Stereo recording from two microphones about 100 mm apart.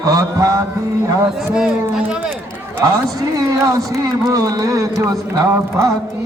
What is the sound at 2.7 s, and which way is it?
Speech, 30° right (ahead or behind).